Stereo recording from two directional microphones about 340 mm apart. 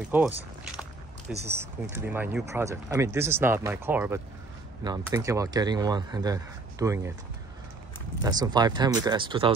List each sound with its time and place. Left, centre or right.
0.1 s biting: centre
1.4 s speech: centre
8.2 s speech: centre